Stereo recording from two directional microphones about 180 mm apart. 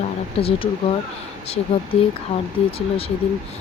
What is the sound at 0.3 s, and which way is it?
Speech, 30° left (ahead or behind).